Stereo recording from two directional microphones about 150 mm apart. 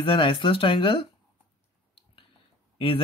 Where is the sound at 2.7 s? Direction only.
35° left (ahead or behind).